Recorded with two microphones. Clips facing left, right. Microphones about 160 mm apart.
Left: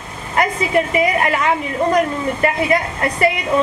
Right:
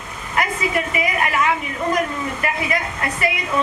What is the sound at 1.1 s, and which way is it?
A woman's voice, 35° left (ahead or behind).